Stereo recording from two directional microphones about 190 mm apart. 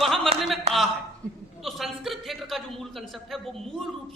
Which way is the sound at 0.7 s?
35° right (ahead or behind).